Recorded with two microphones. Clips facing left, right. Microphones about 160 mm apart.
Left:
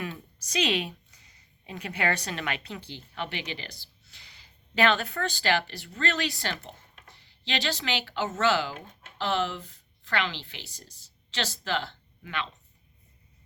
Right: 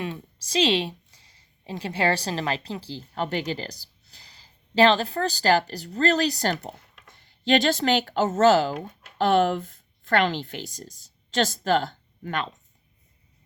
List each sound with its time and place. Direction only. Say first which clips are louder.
0.0 s a woman's voice: right 4 dB; 30° right (ahead or behind); by 12.5 s 45° right (ahead or behind)